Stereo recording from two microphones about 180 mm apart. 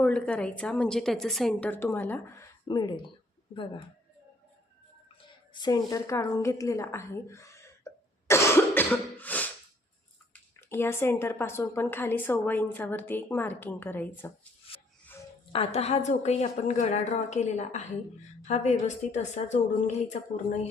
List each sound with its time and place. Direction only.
0.0 s speech: 5° left (ahead or behind); by 3.1 s 25° left (ahead or behind)
5.5 s speech: 20° left (ahead or behind)
8.3 s cough: 15° left (ahead or behind)
10.3 s speech: 10° left (ahead or behind)
15.5 s a woman's voice: 35° left (ahead or behind)